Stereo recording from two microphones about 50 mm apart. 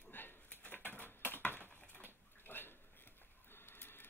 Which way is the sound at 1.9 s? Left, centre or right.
Left.